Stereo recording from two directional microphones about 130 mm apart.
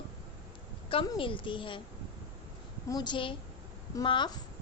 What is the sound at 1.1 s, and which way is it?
Speech, 40° left (ahead or behind).